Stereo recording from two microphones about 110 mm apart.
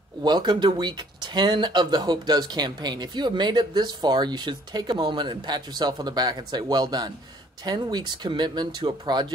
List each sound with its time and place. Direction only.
0.2 s speech: 40° right (ahead or behind)